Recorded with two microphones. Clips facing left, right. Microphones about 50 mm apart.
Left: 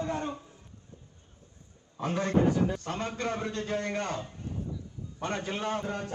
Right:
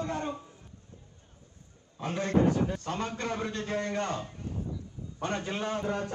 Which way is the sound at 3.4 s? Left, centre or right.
Right.